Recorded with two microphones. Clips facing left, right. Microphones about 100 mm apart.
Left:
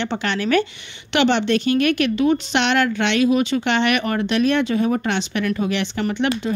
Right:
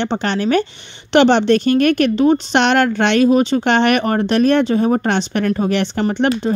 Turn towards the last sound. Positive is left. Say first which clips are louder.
# right 5 dB
turn(degrees=-35)  # may be behind; listen again after turning